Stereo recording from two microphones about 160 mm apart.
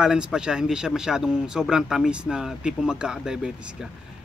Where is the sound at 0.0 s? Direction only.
5° right (ahead or behind).